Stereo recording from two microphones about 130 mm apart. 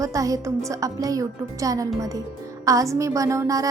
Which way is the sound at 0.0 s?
25° right (ahead or behind).